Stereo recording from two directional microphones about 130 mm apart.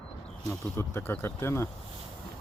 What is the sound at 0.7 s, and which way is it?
Speech, 20° left (ahead or behind).